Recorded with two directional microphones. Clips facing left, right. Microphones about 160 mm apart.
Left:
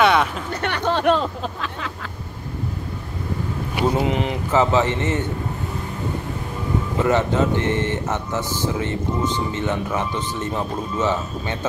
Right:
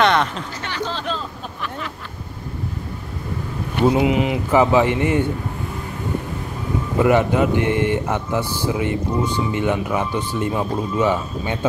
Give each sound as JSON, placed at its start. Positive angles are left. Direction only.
{"t": 0.0, "sound": "a sound", "side_deg": 5}
{"t": 0.6, "sound": "speech", "side_deg": 60}
{"t": 3.8, "sound": "speech", "side_deg": -10}
{"t": 7.0, "sound": "speech", "side_deg": -15}